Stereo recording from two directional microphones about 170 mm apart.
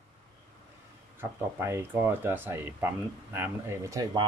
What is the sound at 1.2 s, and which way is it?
Speech, 15° right (ahead or behind).